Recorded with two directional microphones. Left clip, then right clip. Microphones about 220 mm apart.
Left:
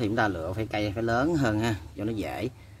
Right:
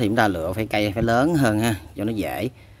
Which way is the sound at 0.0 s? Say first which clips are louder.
Right 6 dB; 35° right (ahead or behind).